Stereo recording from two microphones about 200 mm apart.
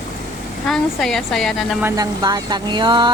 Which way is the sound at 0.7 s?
Centre (ahead or behind).